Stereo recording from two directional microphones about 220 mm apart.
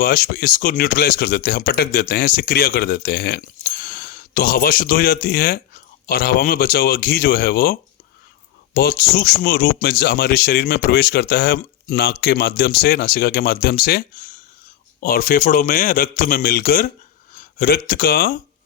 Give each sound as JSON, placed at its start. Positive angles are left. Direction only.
{"t": 0.0, "sound": "speech", "side_deg": 40}